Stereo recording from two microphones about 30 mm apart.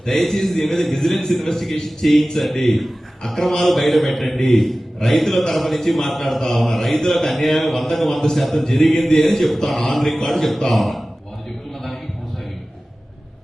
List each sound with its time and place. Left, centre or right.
0.0 s a man's voice: centre